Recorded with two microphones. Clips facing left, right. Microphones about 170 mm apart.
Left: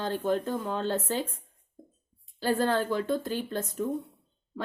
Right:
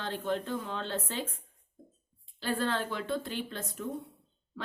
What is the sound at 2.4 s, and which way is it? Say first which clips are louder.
Speech: left 5 dB; 40° left (ahead or behind).